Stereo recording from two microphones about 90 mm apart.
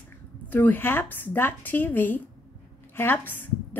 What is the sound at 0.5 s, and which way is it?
A woman's voice, 20° left (ahead or behind).